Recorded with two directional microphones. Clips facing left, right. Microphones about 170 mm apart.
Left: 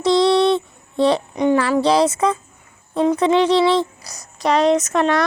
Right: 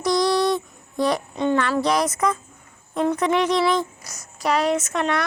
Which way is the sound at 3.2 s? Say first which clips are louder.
Left 6 dB; 30° left (ahead or behind).